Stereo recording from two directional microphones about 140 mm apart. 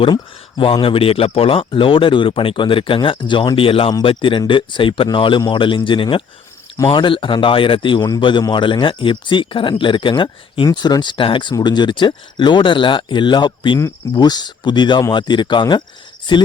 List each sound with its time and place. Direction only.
0.0 s speech: 35° left (ahead or behind)